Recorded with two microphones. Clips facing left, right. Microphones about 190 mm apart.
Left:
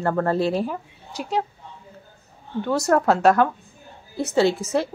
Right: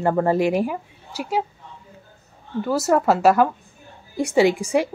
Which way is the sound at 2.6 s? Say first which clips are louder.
Right 1 dB; 5° right (ahead or behind).